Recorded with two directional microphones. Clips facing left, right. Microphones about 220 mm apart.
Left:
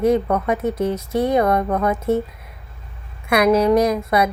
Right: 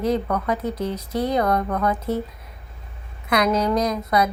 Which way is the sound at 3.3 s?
25° left (ahead or behind).